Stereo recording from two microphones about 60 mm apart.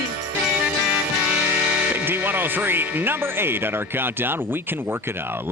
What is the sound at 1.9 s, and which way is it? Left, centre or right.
Speech, right.